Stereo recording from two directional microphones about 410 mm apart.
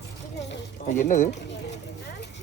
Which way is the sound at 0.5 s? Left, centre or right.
Centre.